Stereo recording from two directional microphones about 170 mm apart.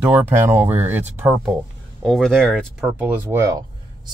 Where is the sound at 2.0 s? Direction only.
Centre (ahead or behind).